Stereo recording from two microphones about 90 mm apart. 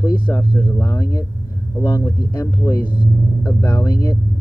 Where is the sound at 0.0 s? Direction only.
55° left (ahead or behind).